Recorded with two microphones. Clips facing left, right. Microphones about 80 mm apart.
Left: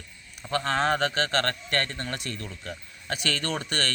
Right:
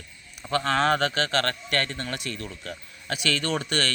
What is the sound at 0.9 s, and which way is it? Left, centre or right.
A man's voice, left.